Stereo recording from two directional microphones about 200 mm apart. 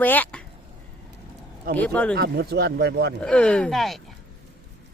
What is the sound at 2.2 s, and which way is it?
Speech, 55° right (ahead or behind).